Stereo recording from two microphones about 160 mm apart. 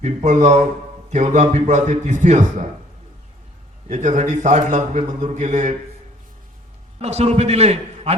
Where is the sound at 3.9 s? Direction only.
45° right (ahead or behind).